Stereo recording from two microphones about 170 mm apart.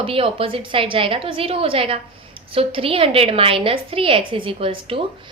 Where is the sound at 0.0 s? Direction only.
35° right (ahead or behind).